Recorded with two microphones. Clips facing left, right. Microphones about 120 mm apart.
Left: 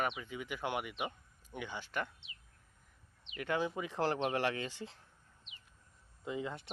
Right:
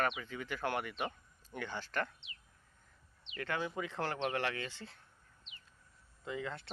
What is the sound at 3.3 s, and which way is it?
Speech, 20° left (ahead or behind).